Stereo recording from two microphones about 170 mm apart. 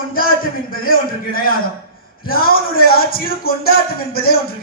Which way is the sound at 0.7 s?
60° left (ahead or behind).